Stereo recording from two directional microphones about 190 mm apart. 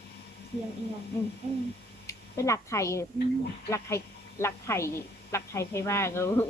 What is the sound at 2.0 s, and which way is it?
Speech, 15° left (ahead or behind).